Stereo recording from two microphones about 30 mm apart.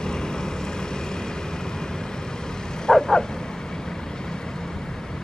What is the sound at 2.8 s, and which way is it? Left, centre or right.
Vehicle, left.